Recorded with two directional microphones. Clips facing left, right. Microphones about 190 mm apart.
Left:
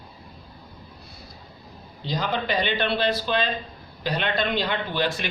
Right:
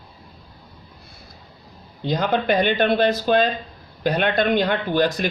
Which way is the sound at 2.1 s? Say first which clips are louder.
Right 6 dB; 55° right (ahead or behind).